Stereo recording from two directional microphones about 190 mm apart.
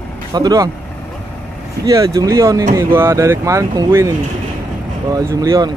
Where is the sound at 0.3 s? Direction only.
20° right (ahead or behind).